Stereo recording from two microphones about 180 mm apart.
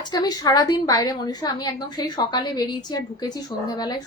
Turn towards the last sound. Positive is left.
turn(degrees=25)  # may be behind; listen again after turning